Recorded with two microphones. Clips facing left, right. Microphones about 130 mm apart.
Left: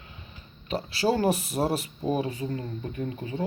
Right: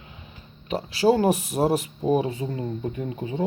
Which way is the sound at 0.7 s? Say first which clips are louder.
Right 5 dB; 15° right (ahead or behind).